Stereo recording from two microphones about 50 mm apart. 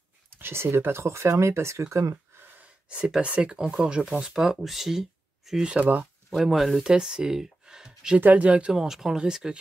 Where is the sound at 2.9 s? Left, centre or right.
Centre.